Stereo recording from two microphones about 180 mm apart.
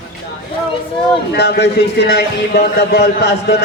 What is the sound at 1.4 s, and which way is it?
A man's voice, 70° left (ahead or behind).